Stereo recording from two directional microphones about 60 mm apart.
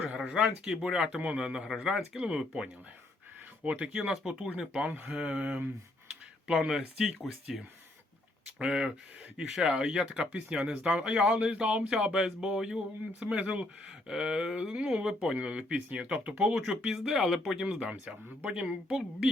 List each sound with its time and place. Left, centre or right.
0.1 s speech: centre
3.6 s speech: right
4.9 s speech: right
5.1 s speech: centre
8.5 s speech: centre
16.9 s speech: centre
17.7 s speech: right